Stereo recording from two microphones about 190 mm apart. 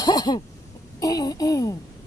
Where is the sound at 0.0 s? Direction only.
20° left (ahead or behind).